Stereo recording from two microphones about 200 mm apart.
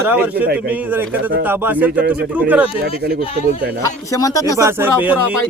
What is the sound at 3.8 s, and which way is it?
Speech, 15° left (ahead or behind).